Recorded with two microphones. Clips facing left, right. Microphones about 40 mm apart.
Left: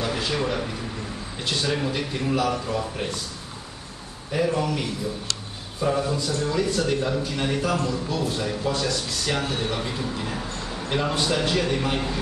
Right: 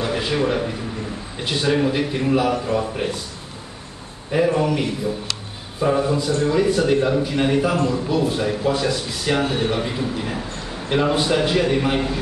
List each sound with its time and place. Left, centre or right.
0.0 s a man's voice: centre
4.3 s a man's voice: centre